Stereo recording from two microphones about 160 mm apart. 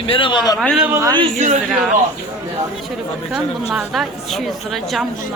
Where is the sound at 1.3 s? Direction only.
45° right (ahead or behind).